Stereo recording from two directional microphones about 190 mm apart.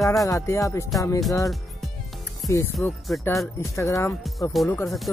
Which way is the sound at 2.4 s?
15° left (ahead or behind).